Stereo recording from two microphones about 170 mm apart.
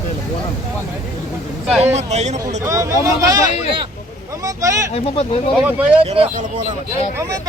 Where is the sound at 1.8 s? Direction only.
40° right (ahead or behind).